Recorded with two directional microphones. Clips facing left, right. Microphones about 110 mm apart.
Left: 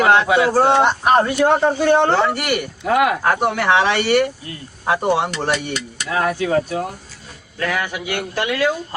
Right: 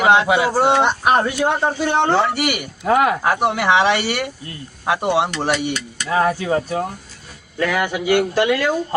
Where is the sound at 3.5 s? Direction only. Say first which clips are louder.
Right 1 dB; 15° right (ahead or behind).